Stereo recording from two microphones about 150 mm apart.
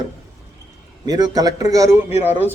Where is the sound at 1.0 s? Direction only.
25° right (ahead or behind).